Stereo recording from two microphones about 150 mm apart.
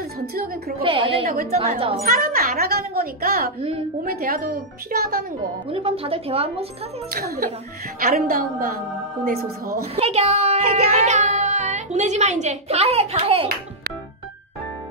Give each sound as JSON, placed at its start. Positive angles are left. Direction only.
{"t": 0.3, "sound": "a child's voice", "side_deg": -90}
{"t": 0.8, "sound": "speech", "side_deg": -35}
{"t": 1.2, "sound": "a child's voice", "side_deg": -90}
{"t": 5.7, "sound": "speech", "side_deg": -40}
{"t": 7.1, "sound": "a child's voice", "side_deg": -90}
{"t": 8.0, "sound": "a woman's voice", "side_deg": -75}
{"t": 9.9, "sound": "child singing", "side_deg": -40}
{"t": 10.7, "sound": "a child's voice", "side_deg": -50}